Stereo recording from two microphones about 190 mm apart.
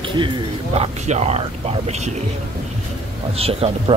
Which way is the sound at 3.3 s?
30° right (ahead or behind).